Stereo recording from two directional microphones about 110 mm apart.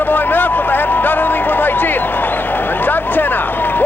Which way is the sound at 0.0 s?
20° left (ahead or behind).